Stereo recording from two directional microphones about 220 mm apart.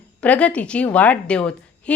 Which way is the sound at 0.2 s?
5° left (ahead or behind).